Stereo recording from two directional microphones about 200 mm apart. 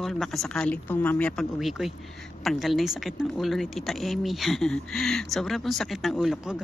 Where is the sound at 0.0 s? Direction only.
Centre (ahead or behind).